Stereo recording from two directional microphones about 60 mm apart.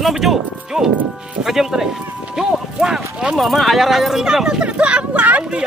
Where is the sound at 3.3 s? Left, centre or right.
Centre.